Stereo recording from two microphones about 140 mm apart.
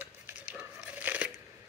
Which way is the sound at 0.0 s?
10° right (ahead or behind).